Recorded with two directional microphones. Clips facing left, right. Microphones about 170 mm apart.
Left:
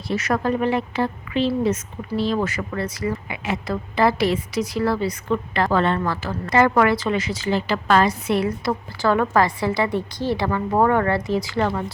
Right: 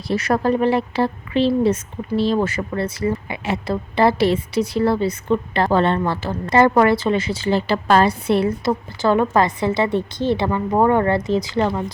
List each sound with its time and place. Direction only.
0.1 s speech: 30° right (ahead or behind)